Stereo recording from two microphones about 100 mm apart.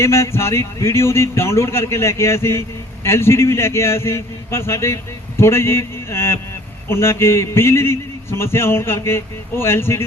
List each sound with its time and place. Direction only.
0.0 s a man's voice: 25° left (ahead or behind)